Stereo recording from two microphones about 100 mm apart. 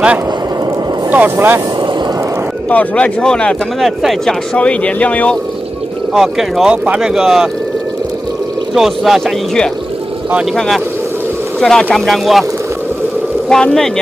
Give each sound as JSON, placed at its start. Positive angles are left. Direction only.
{"t": 1.1, "sound": "speech", "side_deg": -20}
{"t": 2.7, "sound": "speech", "side_deg": 15}
{"t": 3.8, "sound": "speech", "side_deg": 0}
{"t": 4.6, "sound": "speech", "side_deg": 10}
{"t": 6.1, "sound": "speech", "side_deg": 0}
{"t": 8.7, "sound": "speech", "side_deg": 0}
{"t": 13.5, "sound": "speech", "side_deg": 5}